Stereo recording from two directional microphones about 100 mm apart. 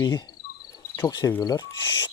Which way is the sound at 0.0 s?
45° left (ahead or behind).